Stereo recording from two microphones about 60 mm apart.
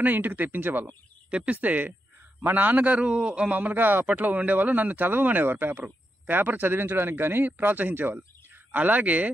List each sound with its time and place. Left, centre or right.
0.0 s speech: right
1.3 s a man's voice: right